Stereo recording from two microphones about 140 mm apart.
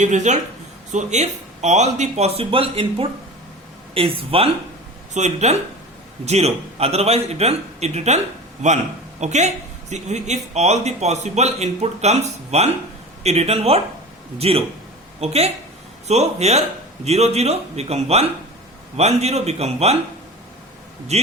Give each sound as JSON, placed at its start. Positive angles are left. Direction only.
{"t": 0.0, "sound": "a man's voice", "side_deg": -60}
{"t": 5.1, "sound": "a man's voice", "side_deg": -55}
{"t": 9.2, "sound": "a man's voice", "side_deg": -55}
{"t": 21.1, "sound": "speech", "side_deg": -50}